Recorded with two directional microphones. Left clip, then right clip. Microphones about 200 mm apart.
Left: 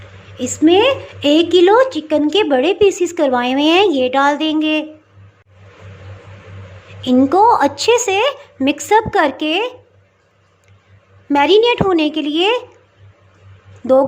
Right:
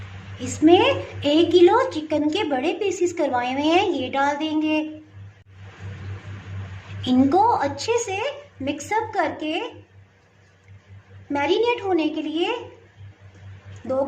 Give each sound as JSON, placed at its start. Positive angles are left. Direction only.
{"t": 0.3, "sound": "a woman's voice", "side_deg": 35}
{"t": 7.0, "sound": "a woman's voice", "side_deg": 25}
{"t": 11.3, "sound": "a woman's voice", "side_deg": 45}